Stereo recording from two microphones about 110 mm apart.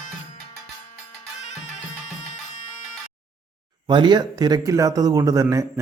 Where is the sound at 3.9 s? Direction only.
40° right (ahead or behind).